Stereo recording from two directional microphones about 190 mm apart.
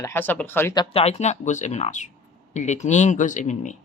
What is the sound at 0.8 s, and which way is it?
Speech, 30° left (ahead or behind).